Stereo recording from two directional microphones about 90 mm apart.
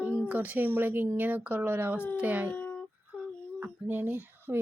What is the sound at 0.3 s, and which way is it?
A woman's voice, 20° right (ahead or behind).